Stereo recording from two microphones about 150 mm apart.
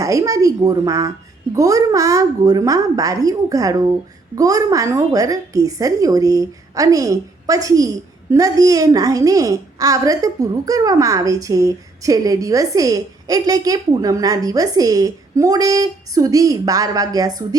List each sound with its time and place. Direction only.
0.0 s a woman's voice: 20° right (ahead or behind)